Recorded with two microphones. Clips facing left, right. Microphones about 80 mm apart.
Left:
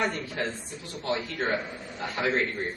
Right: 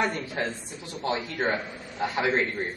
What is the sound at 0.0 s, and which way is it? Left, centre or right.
A man's voice, centre.